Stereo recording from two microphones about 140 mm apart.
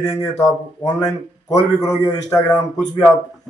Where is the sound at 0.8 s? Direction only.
25° left (ahead or behind).